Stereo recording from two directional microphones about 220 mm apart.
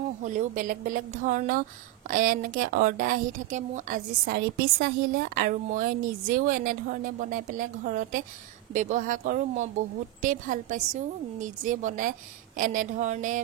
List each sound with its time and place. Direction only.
0.2 s a woman's voice: 35° right (ahead or behind)